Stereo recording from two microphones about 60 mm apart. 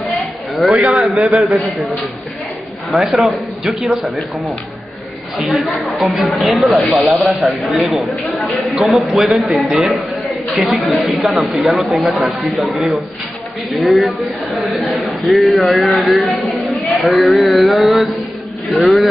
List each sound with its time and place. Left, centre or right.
0.7 s a man's voice: right
1.3 s a man's voice: centre
2.9 s a man's voice: centre